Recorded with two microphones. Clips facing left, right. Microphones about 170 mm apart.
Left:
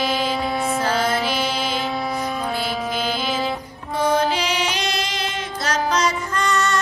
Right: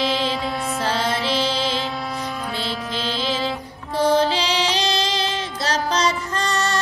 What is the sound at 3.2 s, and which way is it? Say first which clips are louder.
Music: even; 30° right (ahead or behind).